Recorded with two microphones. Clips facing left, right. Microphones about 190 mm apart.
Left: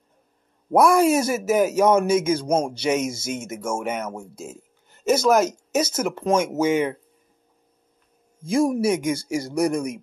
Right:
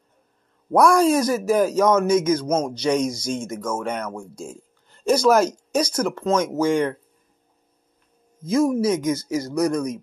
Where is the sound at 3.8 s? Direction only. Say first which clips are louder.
Even; 5° left (ahead or behind).